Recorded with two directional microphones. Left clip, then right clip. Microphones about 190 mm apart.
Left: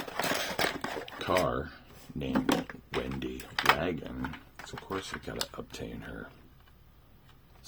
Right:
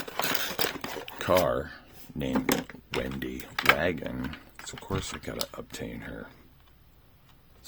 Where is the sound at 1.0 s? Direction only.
35° right (ahead or behind).